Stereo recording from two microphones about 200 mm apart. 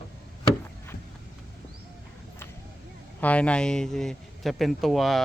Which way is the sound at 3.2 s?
5° left (ahead or behind).